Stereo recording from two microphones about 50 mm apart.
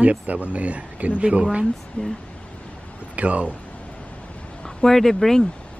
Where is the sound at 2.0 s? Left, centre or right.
Left.